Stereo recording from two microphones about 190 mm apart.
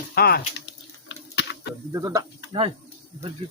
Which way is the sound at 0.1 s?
55° left (ahead or behind).